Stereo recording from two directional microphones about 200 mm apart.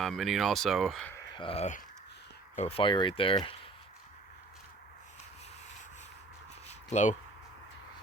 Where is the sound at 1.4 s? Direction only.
30° left (ahead or behind).